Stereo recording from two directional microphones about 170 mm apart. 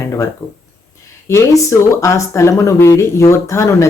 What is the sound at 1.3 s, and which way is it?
Speech, 15° left (ahead or behind).